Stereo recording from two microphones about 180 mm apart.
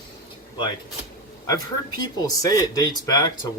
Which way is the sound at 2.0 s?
20° left (ahead or behind).